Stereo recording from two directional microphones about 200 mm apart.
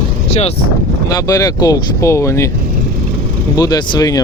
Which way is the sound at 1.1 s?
15° left (ahead or behind).